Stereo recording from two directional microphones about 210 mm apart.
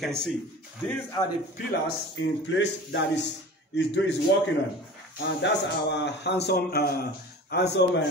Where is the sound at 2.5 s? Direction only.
60° left (ahead or behind).